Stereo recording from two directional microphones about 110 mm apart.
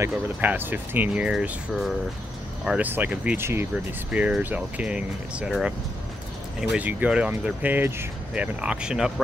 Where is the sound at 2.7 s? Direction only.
15° right (ahead or behind).